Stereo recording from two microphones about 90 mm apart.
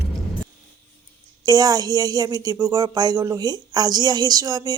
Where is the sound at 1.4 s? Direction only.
45° right (ahead or behind).